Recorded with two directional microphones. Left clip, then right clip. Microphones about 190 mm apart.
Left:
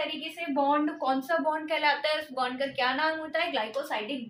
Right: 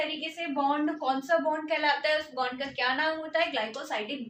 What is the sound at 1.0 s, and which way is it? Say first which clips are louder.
Speech: even; 20° left (ahead or behind).